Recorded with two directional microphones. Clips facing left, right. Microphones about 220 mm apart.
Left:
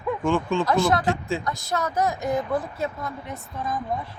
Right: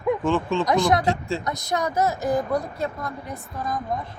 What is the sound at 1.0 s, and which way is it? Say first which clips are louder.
Speech: right 1 dB; centre (ahead or behind).